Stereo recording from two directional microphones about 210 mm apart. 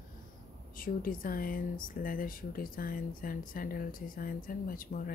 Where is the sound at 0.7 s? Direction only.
40° left (ahead or behind).